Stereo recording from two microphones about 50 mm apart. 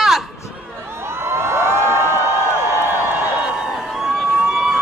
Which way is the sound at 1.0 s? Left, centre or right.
Right.